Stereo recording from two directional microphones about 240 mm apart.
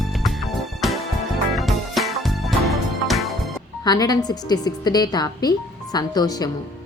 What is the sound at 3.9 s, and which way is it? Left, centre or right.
Speech, centre.